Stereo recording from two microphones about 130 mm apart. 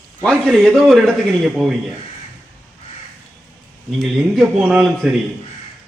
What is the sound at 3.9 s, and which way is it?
Speech, centre (ahead or behind).